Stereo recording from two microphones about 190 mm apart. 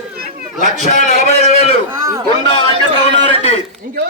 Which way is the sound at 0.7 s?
45° left (ahead or behind).